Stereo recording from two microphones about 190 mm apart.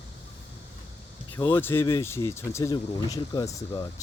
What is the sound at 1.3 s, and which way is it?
Speech, 10° left (ahead or behind).